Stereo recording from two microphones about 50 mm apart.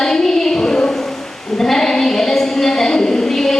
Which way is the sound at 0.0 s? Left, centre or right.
Centre.